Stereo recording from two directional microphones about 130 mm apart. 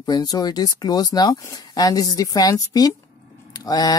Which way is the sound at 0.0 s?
30° left (ahead or behind).